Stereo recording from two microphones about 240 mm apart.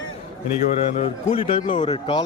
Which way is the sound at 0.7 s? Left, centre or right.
Left.